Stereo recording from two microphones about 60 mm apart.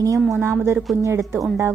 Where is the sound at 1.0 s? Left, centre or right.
Right.